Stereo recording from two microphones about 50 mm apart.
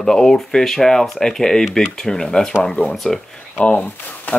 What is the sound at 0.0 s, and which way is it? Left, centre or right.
Speech, centre.